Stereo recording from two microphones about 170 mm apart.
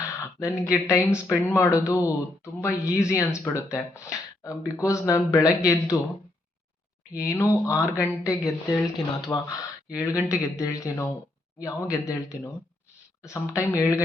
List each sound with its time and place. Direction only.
0.0 s speech: 20° left (ahead or behind)
7.1 s speech: 15° left (ahead or behind)